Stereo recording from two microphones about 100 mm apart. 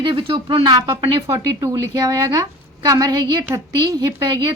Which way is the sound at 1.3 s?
30° right (ahead or behind).